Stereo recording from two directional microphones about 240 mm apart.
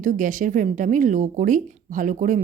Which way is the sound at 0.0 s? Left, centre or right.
Right.